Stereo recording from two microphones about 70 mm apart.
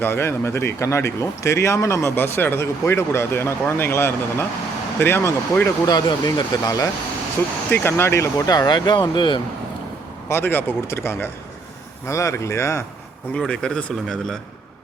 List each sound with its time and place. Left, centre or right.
0.0 s speech: left
5.8 s speech: left
7.7 s speech: left
8.4 s speech: left
10.2 s speech: left
13.3 s speech: centre